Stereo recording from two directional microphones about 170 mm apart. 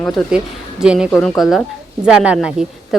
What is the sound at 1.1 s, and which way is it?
Speech, 15° left (ahead or behind).